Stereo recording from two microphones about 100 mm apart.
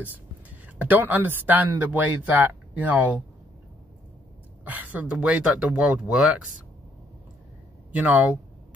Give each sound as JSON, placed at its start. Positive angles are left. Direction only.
{"t": 0.7, "sound": "speech", "side_deg": -15}
{"t": 4.6, "sound": "speech", "side_deg": -15}
{"t": 7.9, "sound": "speech", "side_deg": -15}